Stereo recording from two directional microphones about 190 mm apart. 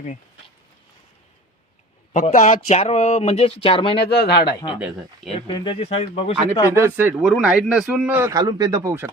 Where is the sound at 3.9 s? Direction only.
60° left (ahead or behind).